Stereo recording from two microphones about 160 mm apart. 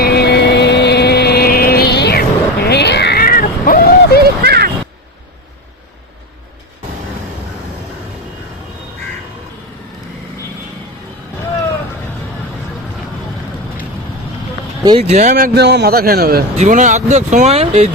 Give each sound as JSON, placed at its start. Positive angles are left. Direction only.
{"t": 0.0, "sound": "vehicle", "side_deg": 85}
{"t": 4.2, "sound": "a sound", "side_deg": -80}
{"t": 15.0, "sound": "speech", "side_deg": -50}
{"t": 16.6, "sound": "speech", "side_deg": -50}